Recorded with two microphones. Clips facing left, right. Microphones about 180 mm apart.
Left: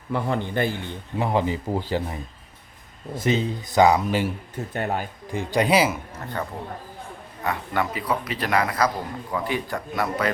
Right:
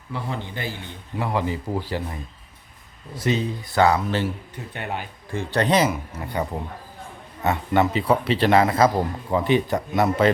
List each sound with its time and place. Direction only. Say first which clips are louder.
0.1 s a man's voice: left 6 dB; 55° left (ahead or behind)
1.2 s speech: left 2 dB; 25° left (ahead or behind)
3.2 s speech: even; 20° left (ahead or behind)
4.5 s speech: left 4 dB; 40° left (ahead or behind)
5.3 s speech: even; 15° left (ahead or behind)
6.2 s a man's voice: right 3 dB; 10° right (ahead or behind)
7.4 s speech: right 5 dB; 25° right (ahead or behind)